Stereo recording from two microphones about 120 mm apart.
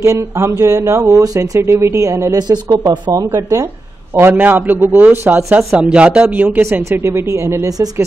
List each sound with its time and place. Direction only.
0.0 s speech: 25° right (ahead or behind)
2.4 s speech: 35° right (ahead or behind)
4.1 s a man's voice: 20° right (ahead or behind)
5.6 s speech: 5° right (ahead or behind); by 7.9 s 25° right (ahead or behind)